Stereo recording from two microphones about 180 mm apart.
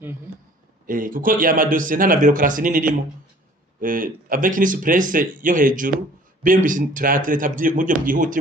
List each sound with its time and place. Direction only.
0.8 s speech: 50° right (ahead or behind)